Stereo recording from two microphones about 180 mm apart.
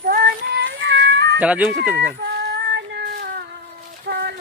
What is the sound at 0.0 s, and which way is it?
Child singing, 55° right (ahead or behind).